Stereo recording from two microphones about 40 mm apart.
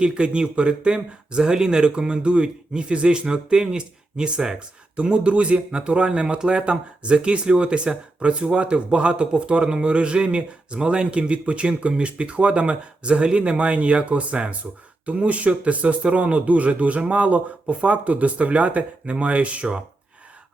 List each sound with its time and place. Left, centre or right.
0.0 s speech: right